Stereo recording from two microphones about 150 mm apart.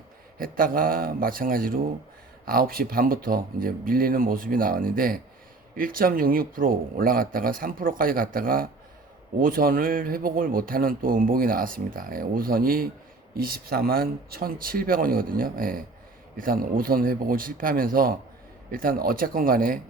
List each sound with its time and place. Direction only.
0.3 s speech: 70° right (ahead or behind)